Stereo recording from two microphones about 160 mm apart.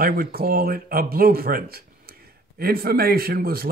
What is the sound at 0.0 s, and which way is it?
Speech, 65° right (ahead or behind).